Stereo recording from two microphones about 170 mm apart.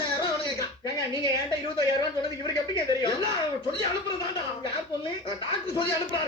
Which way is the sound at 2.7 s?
25° left (ahead or behind).